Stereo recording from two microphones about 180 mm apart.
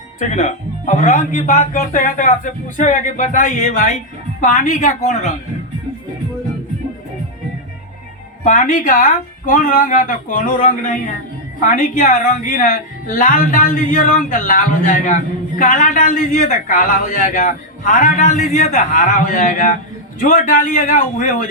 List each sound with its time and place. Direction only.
0.2 s a man's voice: 40° left (ahead or behind)
8.4 s a man's voice: 45° left (ahead or behind)